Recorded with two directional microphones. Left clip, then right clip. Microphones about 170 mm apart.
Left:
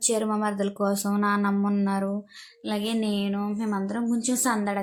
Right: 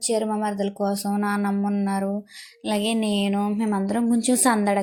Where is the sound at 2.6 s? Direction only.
15° right (ahead or behind).